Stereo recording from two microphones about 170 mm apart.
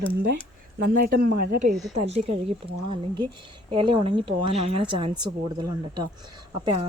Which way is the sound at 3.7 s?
30° right (ahead or behind).